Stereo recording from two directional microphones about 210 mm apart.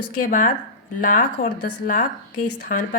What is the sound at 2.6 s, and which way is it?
Speech, 40° left (ahead or behind).